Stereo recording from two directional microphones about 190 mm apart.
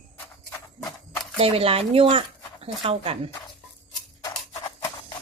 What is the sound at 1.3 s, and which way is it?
Speech, 30° right (ahead or behind).